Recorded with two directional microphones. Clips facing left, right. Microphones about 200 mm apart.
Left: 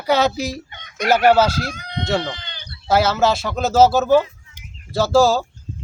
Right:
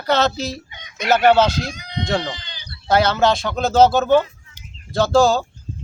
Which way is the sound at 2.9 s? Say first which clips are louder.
Even; 5° left (ahead or behind).